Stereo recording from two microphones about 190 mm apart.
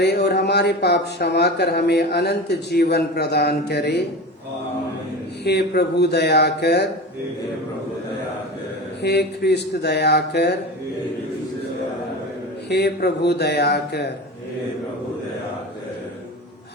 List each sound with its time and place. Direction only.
0.0 s speech: 60° left (ahead or behind)
5.5 s speech: 60° left (ahead or behind)
9.0 s speech: 60° left (ahead or behind)
12.6 s speech: 60° left (ahead or behind)